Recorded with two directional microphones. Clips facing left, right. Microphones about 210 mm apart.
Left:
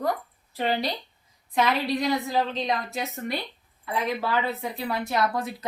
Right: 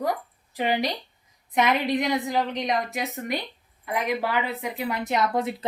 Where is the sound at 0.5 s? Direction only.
15° right (ahead or behind).